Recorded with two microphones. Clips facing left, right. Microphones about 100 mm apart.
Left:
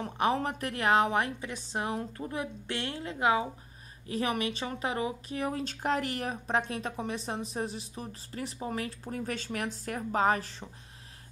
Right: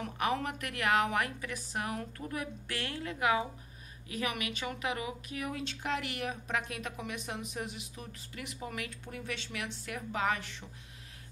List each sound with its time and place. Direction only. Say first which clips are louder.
0.0 s a woman's voice: left 4 dB; 30° left (ahead or behind)